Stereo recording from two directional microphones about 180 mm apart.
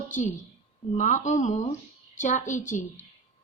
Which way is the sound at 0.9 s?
45° left (ahead or behind).